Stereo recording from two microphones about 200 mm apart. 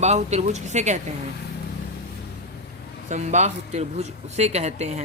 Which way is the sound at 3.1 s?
35° right (ahead or behind).